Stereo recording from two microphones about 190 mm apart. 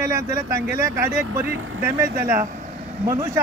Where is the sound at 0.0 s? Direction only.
15° right (ahead or behind).